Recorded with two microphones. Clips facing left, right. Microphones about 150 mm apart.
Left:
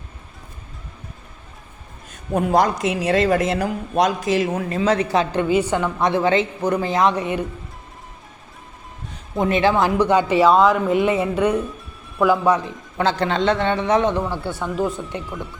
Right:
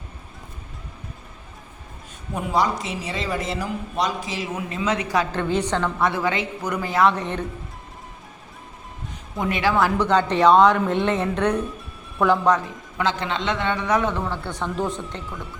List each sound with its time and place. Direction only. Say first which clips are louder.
2.3 s a man's voice: left 5 dB; 50° left (ahead or behind)
2.9 s speech: left 10 dB; 70° left (ahead or behind)
3.5 s a man's voice: left 6 dB; 50° left (ahead or behind)
4.8 s a woman's voice: left 4 dB; 35° left (ahead or behind)
5.4 s a woman's voice: left 4 dB; 10° left (ahead or behind)
9.4 s speech: left 3 dB; 25° left (ahead or behind); by 12.5 s 5° left (ahead or behind)
13.0 s a man's voice: left 5 dB; 35° left (ahead or behind)
14.3 s speech: left 2 dB; 10° left (ahead or behind)